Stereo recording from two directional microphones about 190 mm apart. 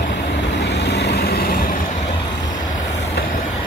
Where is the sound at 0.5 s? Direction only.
60° left (ahead or behind).